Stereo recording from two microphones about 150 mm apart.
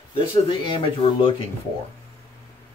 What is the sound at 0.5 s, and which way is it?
Speech, 35° left (ahead or behind).